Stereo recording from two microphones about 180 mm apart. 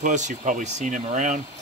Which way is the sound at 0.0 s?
45° right (ahead or behind).